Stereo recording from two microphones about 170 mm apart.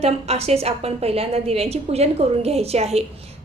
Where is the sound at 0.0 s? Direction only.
40° right (ahead or behind).